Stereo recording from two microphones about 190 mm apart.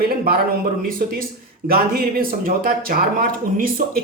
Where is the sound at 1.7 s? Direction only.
50° right (ahead or behind).